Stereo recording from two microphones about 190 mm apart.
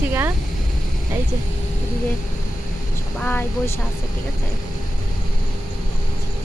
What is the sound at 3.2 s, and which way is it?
Speech, 10° left (ahead or behind).